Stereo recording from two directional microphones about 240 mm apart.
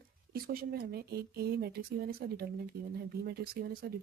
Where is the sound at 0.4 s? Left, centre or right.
Right.